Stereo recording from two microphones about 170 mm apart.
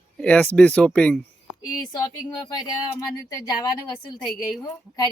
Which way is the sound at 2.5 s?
25° left (ahead or behind).